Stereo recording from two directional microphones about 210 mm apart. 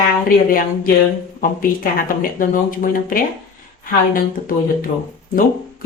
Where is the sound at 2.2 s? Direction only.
40° left (ahead or behind).